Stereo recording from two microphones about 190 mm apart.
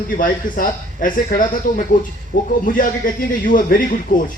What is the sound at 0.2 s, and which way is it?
A man's voice, 45° left (ahead or behind).